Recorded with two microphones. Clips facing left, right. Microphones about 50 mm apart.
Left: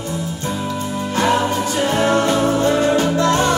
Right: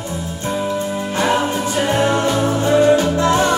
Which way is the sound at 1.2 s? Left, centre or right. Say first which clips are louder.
Left 1 dB; centre.